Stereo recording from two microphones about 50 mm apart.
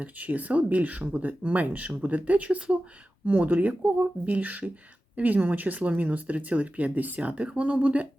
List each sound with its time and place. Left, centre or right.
0.0 s speech: right